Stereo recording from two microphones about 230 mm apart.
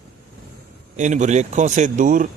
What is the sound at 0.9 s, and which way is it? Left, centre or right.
Speech, right.